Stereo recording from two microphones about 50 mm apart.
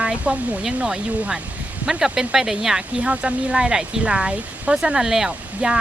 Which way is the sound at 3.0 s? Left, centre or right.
Right.